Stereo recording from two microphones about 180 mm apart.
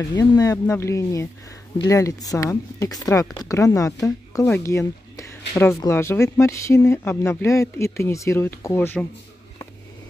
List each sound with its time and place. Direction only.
0.1 s speech: 20° left (ahead or behind)